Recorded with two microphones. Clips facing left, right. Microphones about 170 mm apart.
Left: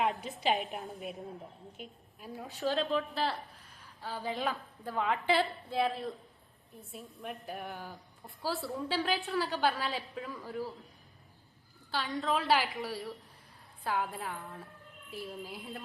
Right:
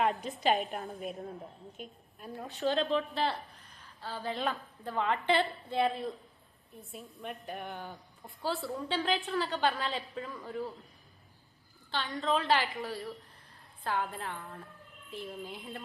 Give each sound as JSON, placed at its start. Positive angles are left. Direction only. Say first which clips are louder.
{"t": 0.3, "sound": "a woman's voice", "louder": "right 2 dB", "side_deg": 0}
{"t": 4.0, "sound": "a woman's voice", "louder": "even", "side_deg": 15}
{"t": 11.9, "sound": "a woman's voice", "louder": "right 1 dB", "side_deg": 5}